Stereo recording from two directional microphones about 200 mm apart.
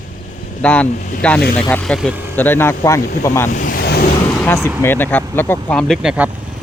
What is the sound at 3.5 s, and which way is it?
Waves, 40° left (ahead or behind).